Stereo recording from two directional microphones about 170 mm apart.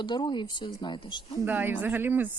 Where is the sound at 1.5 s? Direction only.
10° right (ahead or behind).